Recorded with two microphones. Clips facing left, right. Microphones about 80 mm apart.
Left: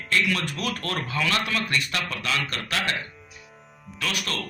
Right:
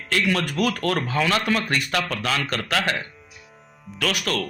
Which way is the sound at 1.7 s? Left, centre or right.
Right.